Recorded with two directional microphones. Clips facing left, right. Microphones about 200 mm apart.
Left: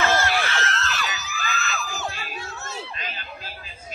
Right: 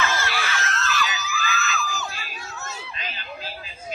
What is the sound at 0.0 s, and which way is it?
Screaming, 45° left (ahead or behind).